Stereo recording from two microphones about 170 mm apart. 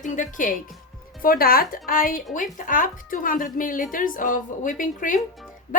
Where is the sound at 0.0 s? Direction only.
50° left (ahead or behind).